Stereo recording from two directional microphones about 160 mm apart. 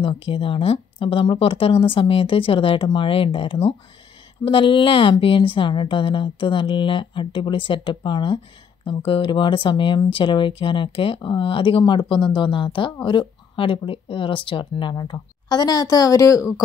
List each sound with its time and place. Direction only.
0.0 s speech: 35° left (ahead or behind)